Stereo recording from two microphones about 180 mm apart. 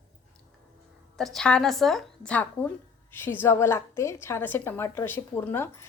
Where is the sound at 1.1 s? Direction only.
Centre (ahead or behind).